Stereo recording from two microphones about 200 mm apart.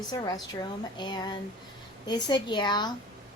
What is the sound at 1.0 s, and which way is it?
A woman's voice, 20° left (ahead or behind).